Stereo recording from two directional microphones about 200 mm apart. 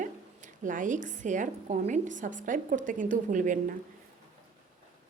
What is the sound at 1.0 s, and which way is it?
A woman's voice, 40° right (ahead or behind).